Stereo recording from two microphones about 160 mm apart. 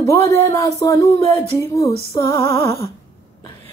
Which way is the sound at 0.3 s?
20° left (ahead or behind).